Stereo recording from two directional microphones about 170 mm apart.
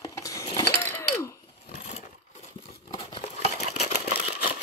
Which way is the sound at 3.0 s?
30° left (ahead or behind).